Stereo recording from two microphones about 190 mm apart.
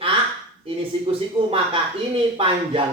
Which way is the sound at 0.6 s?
30° right (ahead or behind).